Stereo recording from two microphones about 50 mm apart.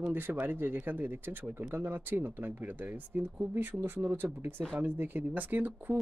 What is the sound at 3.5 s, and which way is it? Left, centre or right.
Speech, right.